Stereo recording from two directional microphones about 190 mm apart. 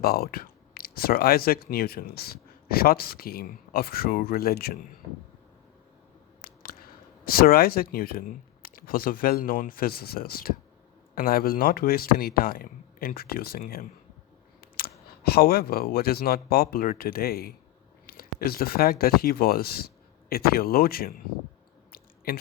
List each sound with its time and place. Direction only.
0.0 s speech: 50° left (ahead or behind)
6.4 s a sound: 50° left (ahead or behind)
7.3 s speech: 50° left (ahead or behind)
21.9 s chewing: 50° left (ahead or behind)